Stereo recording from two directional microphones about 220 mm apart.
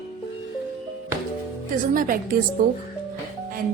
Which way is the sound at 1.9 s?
40° right (ahead or behind).